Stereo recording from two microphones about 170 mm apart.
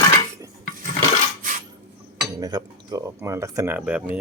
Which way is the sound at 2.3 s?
25° right (ahead or behind).